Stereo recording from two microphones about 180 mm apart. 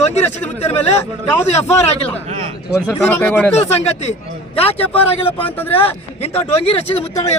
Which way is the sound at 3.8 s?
35° left (ahead or behind).